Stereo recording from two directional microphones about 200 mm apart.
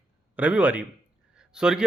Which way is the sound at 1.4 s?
5° right (ahead or behind).